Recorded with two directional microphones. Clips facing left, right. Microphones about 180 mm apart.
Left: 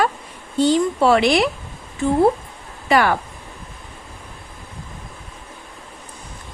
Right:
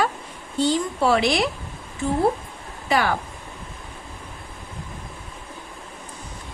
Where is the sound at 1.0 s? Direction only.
65° left (ahead or behind).